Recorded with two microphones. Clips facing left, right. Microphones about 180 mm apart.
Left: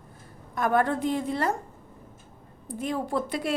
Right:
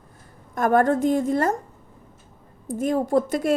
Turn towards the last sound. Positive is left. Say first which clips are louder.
# right 8 dB
turn(degrees=-45)  # may be behind; listen again after turning